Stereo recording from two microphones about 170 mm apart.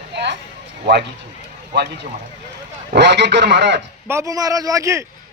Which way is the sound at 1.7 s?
85° right.